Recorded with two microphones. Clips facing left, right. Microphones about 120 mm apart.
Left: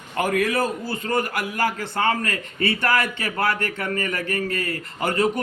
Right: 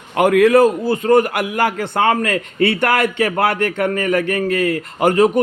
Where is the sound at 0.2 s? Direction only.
70° right (ahead or behind).